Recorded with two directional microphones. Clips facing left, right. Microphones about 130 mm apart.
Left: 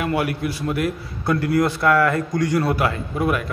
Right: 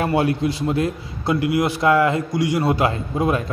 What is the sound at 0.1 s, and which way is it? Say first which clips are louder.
A man's voice: right 3 dB; 25° right (ahead or behind).